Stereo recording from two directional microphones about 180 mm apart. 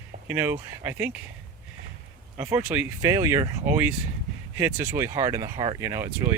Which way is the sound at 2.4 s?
15° right (ahead or behind).